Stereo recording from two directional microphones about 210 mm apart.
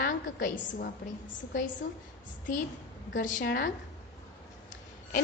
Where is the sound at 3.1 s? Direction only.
40° left (ahead or behind).